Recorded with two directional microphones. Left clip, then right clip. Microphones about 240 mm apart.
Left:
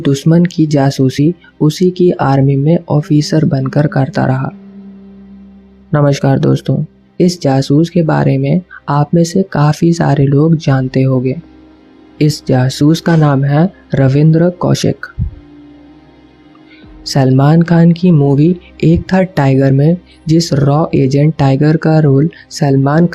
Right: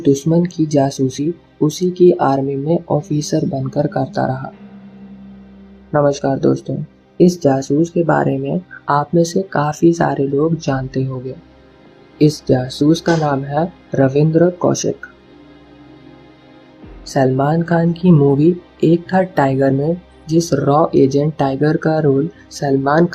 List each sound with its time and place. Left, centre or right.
0.0 s speech: left
5.9 s speech: left
12.1 s speech: left
17.2 s speech: left